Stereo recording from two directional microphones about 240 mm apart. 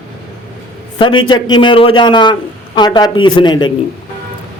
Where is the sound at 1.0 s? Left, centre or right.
Centre.